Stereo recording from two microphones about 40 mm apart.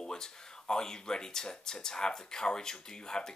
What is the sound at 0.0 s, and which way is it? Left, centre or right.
Speech, centre.